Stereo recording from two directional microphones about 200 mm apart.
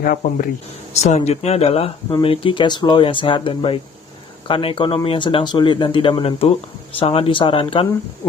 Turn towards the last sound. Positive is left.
turn(degrees=25)  # may be behind; listen again after turning